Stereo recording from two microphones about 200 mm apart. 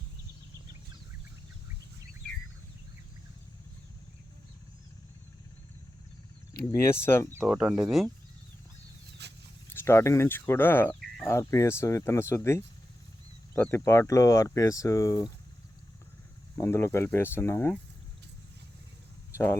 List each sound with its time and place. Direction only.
6.7 s speech: 15° left (ahead or behind)
7.3 s speech: 5° right (ahead or behind)
9.2 s a sound: 55° right (ahead or behind)
9.7 s speech: 15° left (ahead or behind)
16.6 s speech: 10° left (ahead or behind)